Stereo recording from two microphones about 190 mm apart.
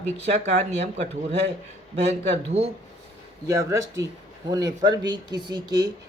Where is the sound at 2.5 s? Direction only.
30° right (ahead or behind).